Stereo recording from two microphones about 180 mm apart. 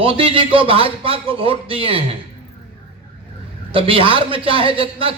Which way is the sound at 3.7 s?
30° right (ahead or behind).